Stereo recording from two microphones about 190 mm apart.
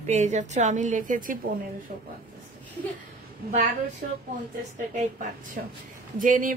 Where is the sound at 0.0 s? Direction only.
35° right (ahead or behind).